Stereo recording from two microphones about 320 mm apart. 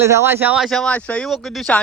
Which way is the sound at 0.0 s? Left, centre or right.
Centre.